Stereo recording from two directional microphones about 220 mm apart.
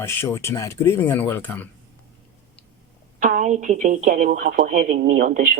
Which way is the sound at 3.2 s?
35° right (ahead or behind).